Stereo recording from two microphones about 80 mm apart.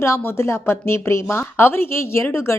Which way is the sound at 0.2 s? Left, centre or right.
Left.